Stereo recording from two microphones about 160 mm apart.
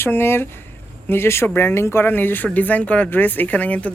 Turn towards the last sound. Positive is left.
turn(degrees=10)  # may be behind; listen again after turning